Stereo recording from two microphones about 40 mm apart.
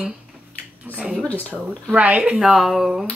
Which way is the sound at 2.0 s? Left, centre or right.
Right.